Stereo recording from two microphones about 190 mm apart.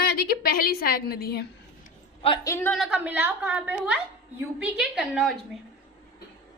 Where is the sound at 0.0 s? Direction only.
55° left (ahead or behind).